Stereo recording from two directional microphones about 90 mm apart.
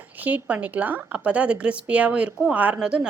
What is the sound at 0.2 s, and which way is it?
Speech, 15° right (ahead or behind).